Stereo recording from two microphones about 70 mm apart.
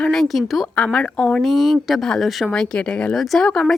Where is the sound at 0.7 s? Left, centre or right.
Centre.